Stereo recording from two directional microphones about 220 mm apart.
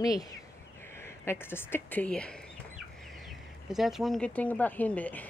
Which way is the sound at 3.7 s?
Centre (ahead or behind).